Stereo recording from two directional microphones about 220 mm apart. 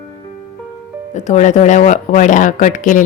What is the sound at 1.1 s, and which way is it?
A woman's voice, 35° left (ahead or behind).